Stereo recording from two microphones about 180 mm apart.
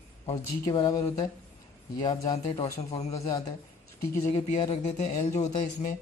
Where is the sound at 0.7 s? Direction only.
20° left (ahead or behind).